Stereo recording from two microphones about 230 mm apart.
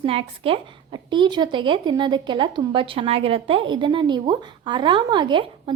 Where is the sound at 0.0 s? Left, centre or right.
Right.